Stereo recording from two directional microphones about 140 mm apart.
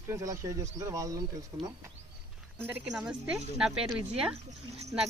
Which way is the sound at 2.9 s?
5° right (ahead or behind).